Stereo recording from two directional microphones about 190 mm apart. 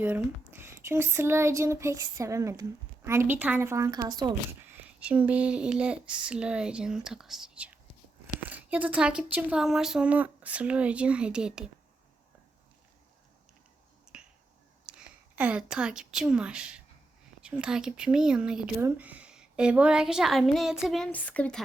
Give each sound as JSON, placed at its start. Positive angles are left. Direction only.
{"t": 0.0, "sound": "speech", "side_deg": -10}
{"t": 4.7, "sound": "speech", "side_deg": -5}
{"t": 14.1, "sound": "finger snapping", "side_deg": -5}
{"t": 14.8, "sound": "speech", "side_deg": -5}